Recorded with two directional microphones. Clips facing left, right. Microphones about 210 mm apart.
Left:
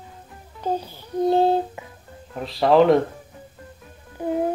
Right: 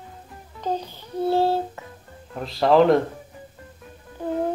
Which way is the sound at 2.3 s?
Centre (ahead or behind).